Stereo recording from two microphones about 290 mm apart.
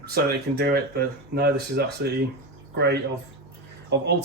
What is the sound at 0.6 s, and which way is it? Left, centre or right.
Speech, right.